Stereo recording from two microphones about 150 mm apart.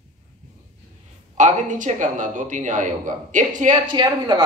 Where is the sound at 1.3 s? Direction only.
55° right (ahead or behind).